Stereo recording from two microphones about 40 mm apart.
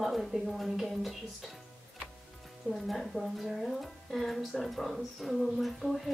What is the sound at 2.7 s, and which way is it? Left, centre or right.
Speech, centre.